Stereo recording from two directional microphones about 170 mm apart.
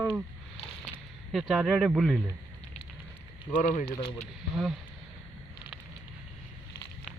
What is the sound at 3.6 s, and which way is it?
Speech, 50° left (ahead or behind).